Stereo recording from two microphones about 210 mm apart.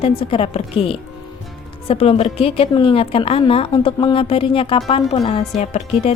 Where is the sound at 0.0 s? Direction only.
25° left (ahead or behind).